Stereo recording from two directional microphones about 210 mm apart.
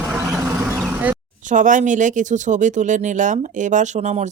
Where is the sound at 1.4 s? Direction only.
35° right (ahead or behind).